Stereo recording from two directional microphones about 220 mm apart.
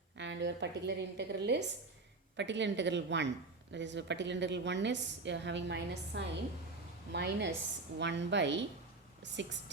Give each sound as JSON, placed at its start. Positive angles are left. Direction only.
{"t": 0.2, "sound": "speech", "side_deg": -50}